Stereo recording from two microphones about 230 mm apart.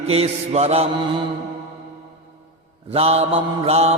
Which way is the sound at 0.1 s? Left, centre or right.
Right.